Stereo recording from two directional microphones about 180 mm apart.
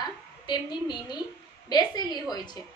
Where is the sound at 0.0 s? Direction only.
25° left (ahead or behind).